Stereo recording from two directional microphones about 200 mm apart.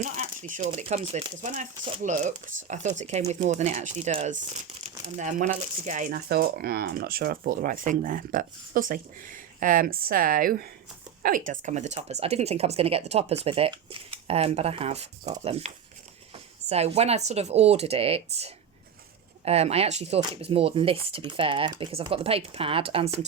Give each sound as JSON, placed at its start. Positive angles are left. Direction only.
{"t": 0.0, "sound": "speech", "side_deg": -35}